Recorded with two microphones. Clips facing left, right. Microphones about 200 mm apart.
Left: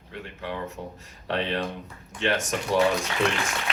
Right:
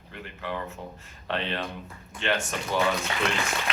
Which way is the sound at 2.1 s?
80° left.